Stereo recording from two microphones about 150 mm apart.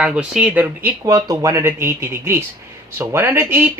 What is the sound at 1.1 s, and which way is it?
Speech, 25° right (ahead or behind).